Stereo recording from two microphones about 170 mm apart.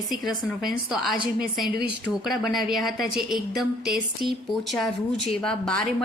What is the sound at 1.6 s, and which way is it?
Speech, 60° right (ahead or behind).